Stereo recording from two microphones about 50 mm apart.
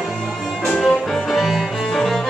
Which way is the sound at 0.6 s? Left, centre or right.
Centre.